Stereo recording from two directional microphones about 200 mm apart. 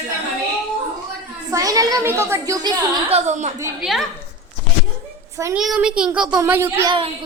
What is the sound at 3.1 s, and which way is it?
Speech, 35° right (ahead or behind).